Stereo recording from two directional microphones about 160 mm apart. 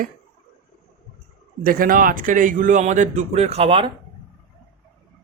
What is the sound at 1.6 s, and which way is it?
A man's voice, 60° right (ahead or behind).